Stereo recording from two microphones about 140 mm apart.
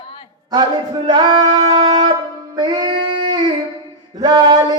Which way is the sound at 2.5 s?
35° right (ahead or behind).